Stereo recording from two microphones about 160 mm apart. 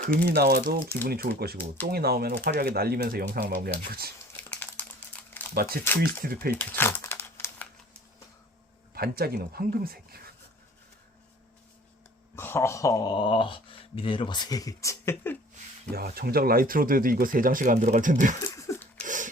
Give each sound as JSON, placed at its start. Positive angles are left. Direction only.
{"t": 0.0, "sound": "speech", "side_deg": -80}
{"t": 4.3, "sound": "crumpling", "side_deg": 10}
{"t": 6.0, "sound": "speech", "side_deg": -70}
{"t": 6.5, "sound": "crumpling", "side_deg": 15}
{"t": 9.0, "sound": "speech", "side_deg": -75}
{"t": 12.4, "sound": "speech", "side_deg": 15}
{"t": 16.0, "sound": "speech", "side_deg": -70}
{"t": 18.4, "sound": "a sound", "side_deg": 20}
{"t": 19.0, "sound": "a sound", "side_deg": -55}